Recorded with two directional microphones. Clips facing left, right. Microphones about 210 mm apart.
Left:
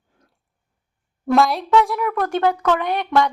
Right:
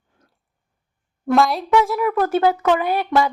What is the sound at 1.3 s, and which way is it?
A woman's voice, centre (ahead or behind).